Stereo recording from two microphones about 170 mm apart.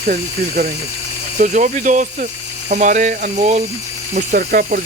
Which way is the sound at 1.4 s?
45° right (ahead or behind).